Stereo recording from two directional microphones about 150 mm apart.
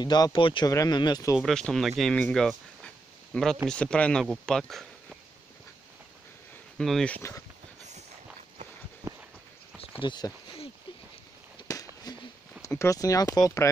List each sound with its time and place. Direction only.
0.0 s speech: 30° left (ahead or behind)
1.3 s speech: centre (ahead or behind)
6.8 s speech: 5° left (ahead or behind)
9.9 s speech: 30° left (ahead or behind)
11.6 s a sound: 25° left (ahead or behind)
12.6 s speech: 20° left (ahead or behind)